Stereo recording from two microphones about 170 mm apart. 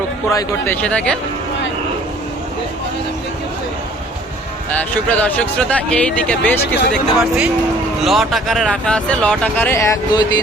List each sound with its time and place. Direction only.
0.3 s speech: 15° left (ahead or behind)
4.7 s speech: 10° left (ahead or behind)
6.9 s speech: 5° right (ahead or behind); by 10.4 s 20° left (ahead or behind)